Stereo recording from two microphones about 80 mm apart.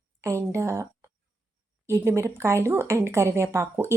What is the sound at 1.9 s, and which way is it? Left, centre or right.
Speech, right.